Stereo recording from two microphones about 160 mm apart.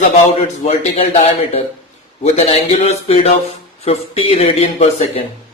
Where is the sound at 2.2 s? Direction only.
40° left (ahead or behind).